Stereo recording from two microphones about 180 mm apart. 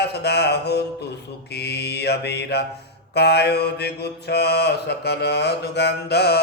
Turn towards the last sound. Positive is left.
turn(degrees=65)  # may be behind; listen again after turning